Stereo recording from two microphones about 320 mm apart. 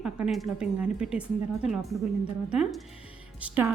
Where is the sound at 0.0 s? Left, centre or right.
Centre.